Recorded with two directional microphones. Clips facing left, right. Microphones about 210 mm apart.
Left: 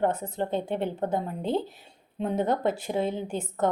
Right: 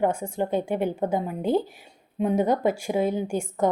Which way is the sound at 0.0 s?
10° right (ahead or behind).